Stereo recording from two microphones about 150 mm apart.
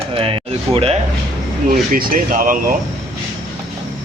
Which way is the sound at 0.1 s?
35° right (ahead or behind).